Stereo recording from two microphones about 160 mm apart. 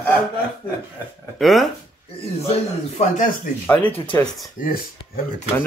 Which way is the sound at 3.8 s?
35° left (ahead or behind).